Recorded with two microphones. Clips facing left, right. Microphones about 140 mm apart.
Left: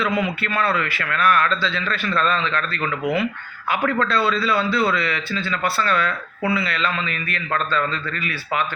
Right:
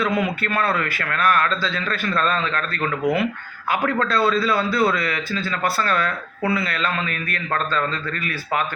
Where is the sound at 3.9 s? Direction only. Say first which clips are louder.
Right 1 dB; 40° right (ahead or behind).